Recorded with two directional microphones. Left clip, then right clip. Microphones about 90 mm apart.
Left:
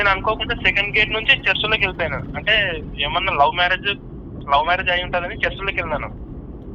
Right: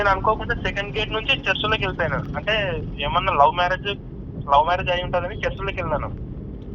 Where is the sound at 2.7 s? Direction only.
55° left (ahead or behind).